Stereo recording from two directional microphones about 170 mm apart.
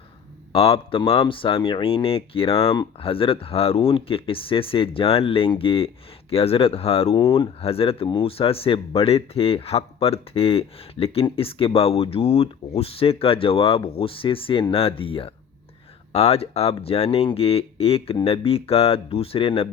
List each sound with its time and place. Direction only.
0.5 s speech: 35° left (ahead or behind)
7.2 s speech: 20° left (ahead or behind)
7.6 s speech: 35° left (ahead or behind)